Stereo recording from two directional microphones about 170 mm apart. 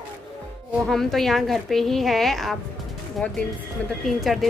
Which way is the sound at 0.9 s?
Centre (ahead or behind).